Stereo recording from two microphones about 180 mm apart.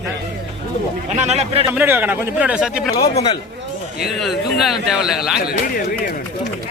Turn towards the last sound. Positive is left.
turn(degrees=55)  # may be behind; listen again after turning